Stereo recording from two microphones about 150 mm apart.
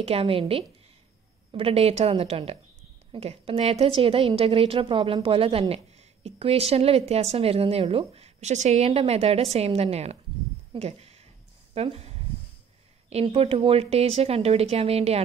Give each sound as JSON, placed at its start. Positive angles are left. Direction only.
{"t": 0.0, "sound": "a woman's voice", "side_deg": -40}
{"t": 11.7, "sound": "a sound", "side_deg": -45}
{"t": 13.1, "sound": "speech", "side_deg": -40}